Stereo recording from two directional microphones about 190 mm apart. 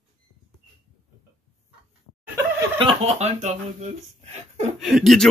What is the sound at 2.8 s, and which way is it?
Speech, 35° right (ahead or behind).